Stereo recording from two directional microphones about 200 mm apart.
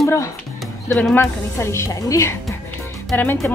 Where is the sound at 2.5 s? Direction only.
15° left (ahead or behind).